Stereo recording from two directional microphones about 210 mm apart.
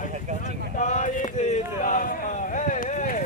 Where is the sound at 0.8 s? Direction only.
35° left (ahead or behind).